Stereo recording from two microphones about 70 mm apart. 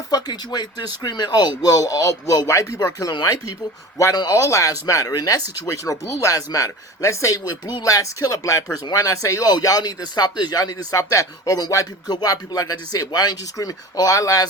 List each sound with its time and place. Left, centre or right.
0.1 s speech: left
2.7 s speech: left
4.3 s speech: left
7.7 s speech: left
9.5 s speech: left
12.0 s speech: left